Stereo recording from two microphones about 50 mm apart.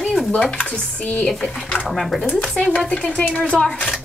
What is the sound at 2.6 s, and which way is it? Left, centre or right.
Speech, left.